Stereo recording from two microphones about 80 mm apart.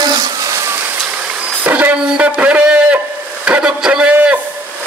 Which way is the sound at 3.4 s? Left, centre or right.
Centre.